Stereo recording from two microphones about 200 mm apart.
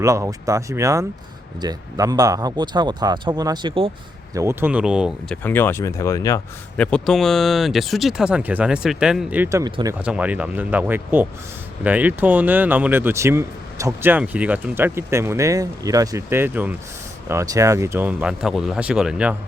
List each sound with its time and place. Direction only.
0.0 s speech: 15° right (ahead or behind)
4.4 s speech: 10° right (ahead or behind)
5.4 s speech: 10° left (ahead or behind)
6.7 s speech: 5° left (ahead or behind)